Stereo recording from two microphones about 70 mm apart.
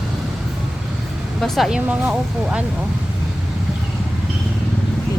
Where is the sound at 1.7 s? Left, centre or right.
Centre.